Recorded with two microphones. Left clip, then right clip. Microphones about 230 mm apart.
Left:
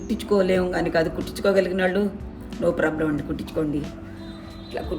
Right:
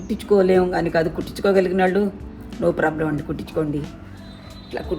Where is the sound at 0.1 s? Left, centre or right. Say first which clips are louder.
Right 4 dB; centre.